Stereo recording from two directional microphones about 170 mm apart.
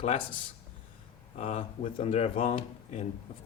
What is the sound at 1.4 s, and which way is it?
Speech, 40° left (ahead or behind).